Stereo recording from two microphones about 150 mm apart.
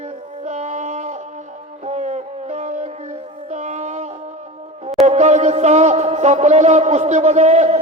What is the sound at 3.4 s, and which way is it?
Music, 50° right (ahead or behind).